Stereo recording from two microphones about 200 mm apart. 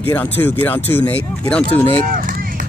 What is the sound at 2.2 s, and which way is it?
Run, 45° right (ahead or behind).